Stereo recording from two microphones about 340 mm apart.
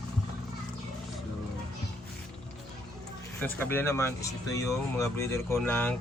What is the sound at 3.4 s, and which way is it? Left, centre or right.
Speech, centre.